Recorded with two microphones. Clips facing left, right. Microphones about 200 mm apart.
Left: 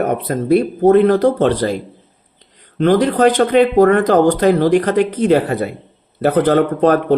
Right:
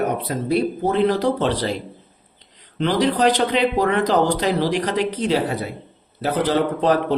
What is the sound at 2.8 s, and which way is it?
A man's voice, 50° left (ahead or behind).